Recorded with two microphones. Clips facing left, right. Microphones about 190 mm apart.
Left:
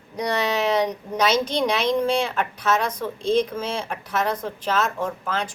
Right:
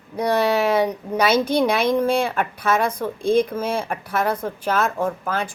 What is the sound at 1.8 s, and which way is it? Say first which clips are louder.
Speech: right 2 dB; 55° right (ahead or behind).